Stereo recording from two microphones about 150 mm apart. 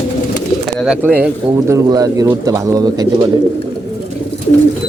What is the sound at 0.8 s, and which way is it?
Speech, 5° right (ahead or behind).